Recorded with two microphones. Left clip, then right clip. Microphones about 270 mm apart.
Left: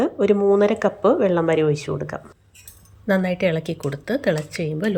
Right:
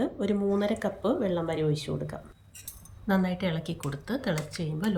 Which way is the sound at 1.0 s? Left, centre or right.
Left.